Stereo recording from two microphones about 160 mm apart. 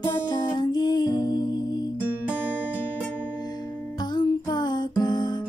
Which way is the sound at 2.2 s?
10° right (ahead or behind).